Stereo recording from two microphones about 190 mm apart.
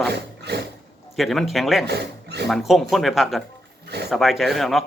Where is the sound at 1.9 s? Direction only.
60° right (ahead or behind).